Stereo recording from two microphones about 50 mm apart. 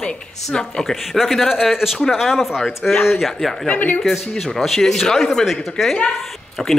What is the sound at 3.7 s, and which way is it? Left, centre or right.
Speech, left.